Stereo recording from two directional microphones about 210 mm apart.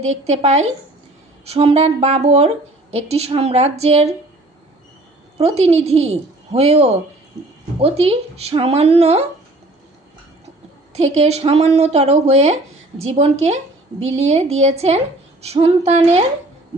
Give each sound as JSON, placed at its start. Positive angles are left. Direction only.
{"t": 0.0, "sound": "a woman's voice", "side_deg": -30}
{"t": 5.4, "sound": "a woman's voice", "side_deg": -30}
{"t": 10.9, "sound": "a woman's voice", "side_deg": -30}